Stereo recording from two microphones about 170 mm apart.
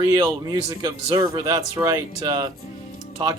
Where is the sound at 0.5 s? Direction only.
25° right (ahead or behind).